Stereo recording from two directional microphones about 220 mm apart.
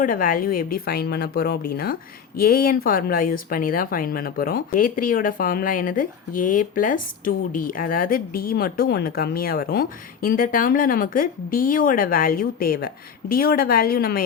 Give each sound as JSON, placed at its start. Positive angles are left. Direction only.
{"t": 0.0, "sound": "a woman's voice", "side_deg": 40}